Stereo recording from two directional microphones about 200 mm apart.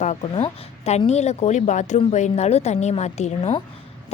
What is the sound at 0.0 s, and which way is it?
A woman's voice, 35° left (ahead or behind).